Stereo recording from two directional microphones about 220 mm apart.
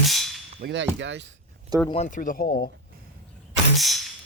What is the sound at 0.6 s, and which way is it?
Speech, 55° right (ahead or behind).